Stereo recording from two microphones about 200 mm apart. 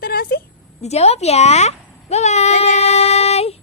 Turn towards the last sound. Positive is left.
turn(degrees=30)  # may be behind; listen again after turning